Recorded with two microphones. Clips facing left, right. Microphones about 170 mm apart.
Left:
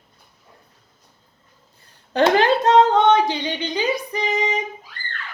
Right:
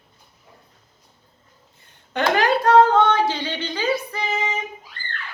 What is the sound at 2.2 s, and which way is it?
Speech, 30° left (ahead or behind).